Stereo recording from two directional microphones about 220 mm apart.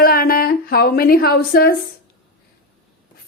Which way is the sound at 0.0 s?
40° left (ahead or behind).